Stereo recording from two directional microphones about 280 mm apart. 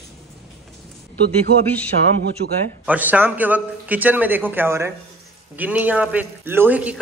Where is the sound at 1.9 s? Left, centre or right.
Right.